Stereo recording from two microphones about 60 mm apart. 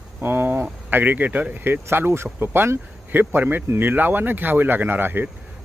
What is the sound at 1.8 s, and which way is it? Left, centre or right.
Speech, right.